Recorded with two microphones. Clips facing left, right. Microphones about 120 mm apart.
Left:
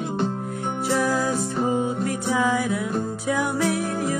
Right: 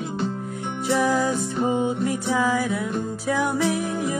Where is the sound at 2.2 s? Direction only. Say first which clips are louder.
Left 1 dB; centre (ahead or behind).